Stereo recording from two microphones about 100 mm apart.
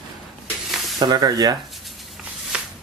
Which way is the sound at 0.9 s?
45° right (ahead or behind).